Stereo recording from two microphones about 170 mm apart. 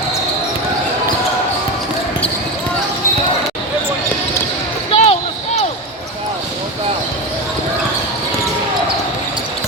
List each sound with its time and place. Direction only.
4.9 s basketball bounce: 35° left (ahead or behind)